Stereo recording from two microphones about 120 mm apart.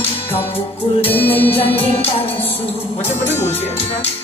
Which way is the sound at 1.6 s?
55° left (ahead or behind).